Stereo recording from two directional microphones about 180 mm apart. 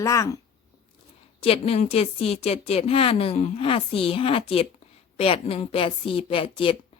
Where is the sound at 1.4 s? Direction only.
35° left (ahead or behind).